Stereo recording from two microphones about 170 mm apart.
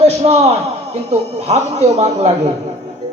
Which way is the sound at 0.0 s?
35° right (ahead or behind).